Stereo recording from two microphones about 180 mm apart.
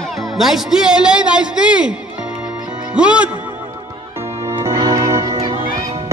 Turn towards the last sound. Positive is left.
turn(degrees=-20)  # may be behind; listen again after turning